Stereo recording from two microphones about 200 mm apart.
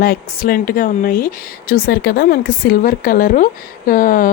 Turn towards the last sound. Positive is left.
turn(degrees=45)  # may be behind; listen again after turning